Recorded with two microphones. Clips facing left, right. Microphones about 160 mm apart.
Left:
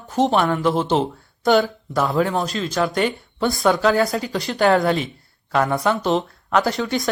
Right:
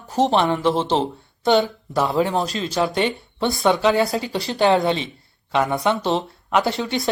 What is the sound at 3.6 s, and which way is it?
Speech, centre (ahead or behind).